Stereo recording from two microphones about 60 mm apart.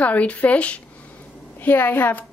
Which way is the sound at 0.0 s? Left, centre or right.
Left.